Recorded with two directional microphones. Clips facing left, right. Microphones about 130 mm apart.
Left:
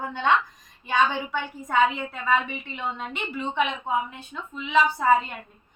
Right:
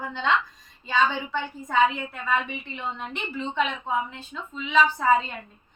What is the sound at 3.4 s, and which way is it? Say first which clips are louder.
A woman's voice: left 1 dB; 15° left (ahead or behind).